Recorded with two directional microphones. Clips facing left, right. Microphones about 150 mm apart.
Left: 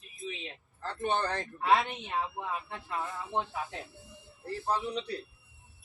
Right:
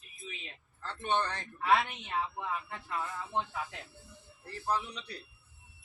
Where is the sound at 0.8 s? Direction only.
40° left (ahead or behind).